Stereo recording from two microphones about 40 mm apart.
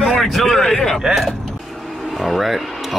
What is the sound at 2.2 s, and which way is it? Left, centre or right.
Speech, centre.